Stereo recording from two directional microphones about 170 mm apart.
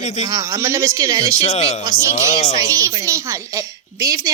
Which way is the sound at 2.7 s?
20° right (ahead or behind).